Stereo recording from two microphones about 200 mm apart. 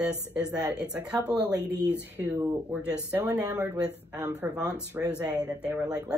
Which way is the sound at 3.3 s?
5° right (ahead or behind).